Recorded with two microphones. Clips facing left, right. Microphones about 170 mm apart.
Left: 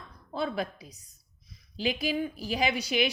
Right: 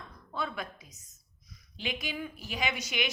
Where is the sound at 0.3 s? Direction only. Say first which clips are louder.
Left 5 dB; 30° left (ahead or behind).